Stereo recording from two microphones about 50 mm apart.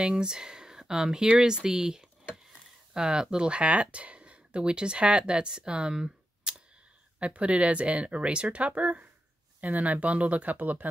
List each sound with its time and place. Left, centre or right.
0.0 s speech: centre; by 10.9 s right